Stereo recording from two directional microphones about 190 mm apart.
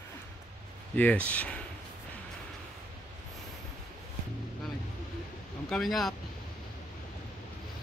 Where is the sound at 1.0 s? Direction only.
5° left (ahead or behind).